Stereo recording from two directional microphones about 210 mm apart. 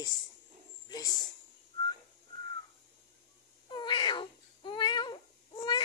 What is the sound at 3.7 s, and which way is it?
Cat, 20° left (ahead or behind).